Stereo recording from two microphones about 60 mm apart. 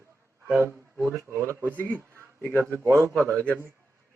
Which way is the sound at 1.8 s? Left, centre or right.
Right.